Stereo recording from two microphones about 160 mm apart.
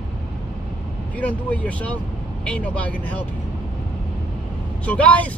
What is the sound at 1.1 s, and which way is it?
Speech, 10° left (ahead or behind).